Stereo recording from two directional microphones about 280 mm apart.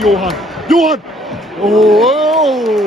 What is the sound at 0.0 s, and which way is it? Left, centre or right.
Speech, centre.